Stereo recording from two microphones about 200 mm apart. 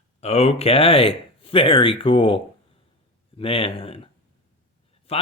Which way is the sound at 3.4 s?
30° left (ahead or behind).